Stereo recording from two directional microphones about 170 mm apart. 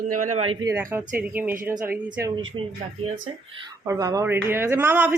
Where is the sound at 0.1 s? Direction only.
50° right (ahead or behind).